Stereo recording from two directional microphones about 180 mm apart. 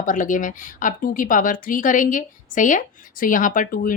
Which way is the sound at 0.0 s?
45° left (ahead or behind).